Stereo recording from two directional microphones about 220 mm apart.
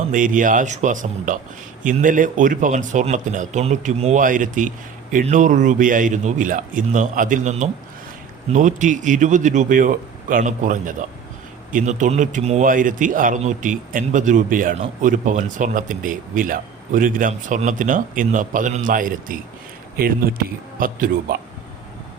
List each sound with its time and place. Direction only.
0.1 s a man's voice: 35° right (ahead or behind)